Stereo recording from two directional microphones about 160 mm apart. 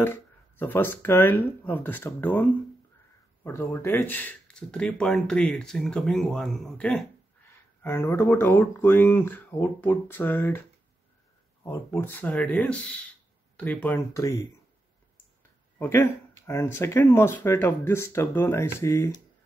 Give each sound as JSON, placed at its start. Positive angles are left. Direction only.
{"t": 0.0, "sound": "speech", "side_deg": 15}
{"t": 3.4, "sound": "speech", "side_deg": 15}
{"t": 7.8, "sound": "speech", "side_deg": 15}
{"t": 11.6, "sound": "speech", "side_deg": 15}
{"t": 15.8, "sound": "speech", "side_deg": 15}